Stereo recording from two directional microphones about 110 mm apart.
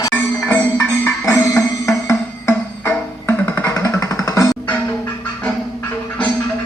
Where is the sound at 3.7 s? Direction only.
30° left (ahead or behind).